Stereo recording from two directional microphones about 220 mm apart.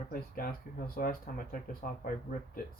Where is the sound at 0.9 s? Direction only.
40° left (ahead or behind).